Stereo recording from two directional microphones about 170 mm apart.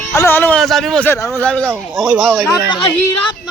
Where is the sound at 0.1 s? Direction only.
15° left (ahead or behind).